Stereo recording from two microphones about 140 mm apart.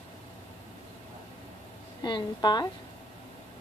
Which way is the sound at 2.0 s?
35° left (ahead or behind).